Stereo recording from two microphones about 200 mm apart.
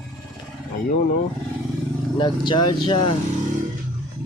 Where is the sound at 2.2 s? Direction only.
25° left (ahead or behind).